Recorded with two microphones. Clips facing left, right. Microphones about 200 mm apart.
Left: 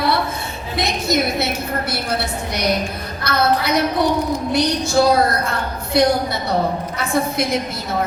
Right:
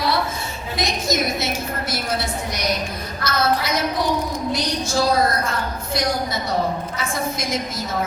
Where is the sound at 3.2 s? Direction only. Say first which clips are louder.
Left 3 dB; 60° left (ahead or behind).